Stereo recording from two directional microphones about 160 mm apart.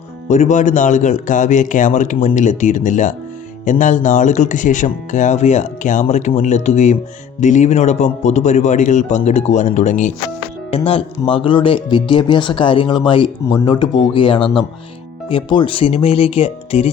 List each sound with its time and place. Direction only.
0.3 s speech: 50° left (ahead or behind)
10.7 s speech: 35° left (ahead or behind)